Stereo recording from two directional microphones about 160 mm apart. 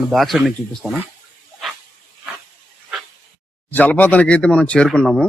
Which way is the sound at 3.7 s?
10° left (ahead or behind).